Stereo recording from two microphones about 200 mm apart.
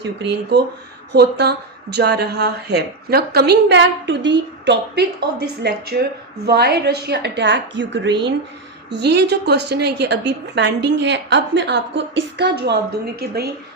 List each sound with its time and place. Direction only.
0.0 s a woman's voice: 60° right (ahead or behind)